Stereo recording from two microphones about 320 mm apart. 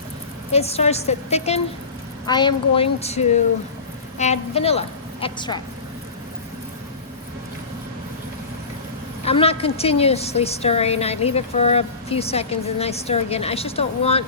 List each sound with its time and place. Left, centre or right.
0.5 s a woman's voice: centre
9.2 s a woman's voice: centre